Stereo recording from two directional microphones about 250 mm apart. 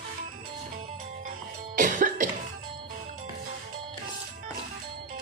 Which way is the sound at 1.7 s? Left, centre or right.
Right.